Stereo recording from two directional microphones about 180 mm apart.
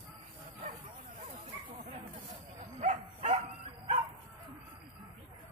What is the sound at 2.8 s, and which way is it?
Bow-wow, 40° right (ahead or behind).